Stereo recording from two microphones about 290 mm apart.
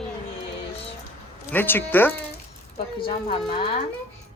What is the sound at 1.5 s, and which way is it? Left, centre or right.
Speech, centre.